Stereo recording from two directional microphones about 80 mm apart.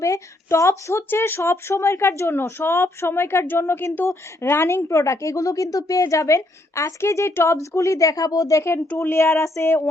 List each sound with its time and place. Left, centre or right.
0.0 s speech: left